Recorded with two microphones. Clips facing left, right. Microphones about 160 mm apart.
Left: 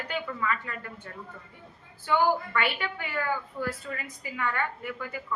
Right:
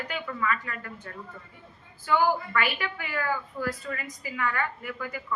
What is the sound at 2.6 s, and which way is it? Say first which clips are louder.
A woman's voice: even; 25° left (ahead or behind).